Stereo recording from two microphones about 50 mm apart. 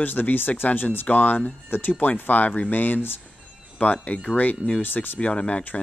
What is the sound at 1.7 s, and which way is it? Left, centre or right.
Speech, left.